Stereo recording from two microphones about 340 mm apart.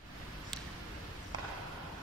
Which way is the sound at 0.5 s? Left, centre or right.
Centre.